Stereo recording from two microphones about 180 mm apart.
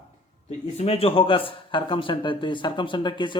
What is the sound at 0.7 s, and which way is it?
Speech, 35° left (ahead or behind).